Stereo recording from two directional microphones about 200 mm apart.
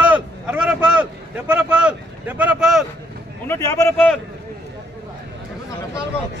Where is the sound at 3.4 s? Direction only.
15° left (ahead or behind).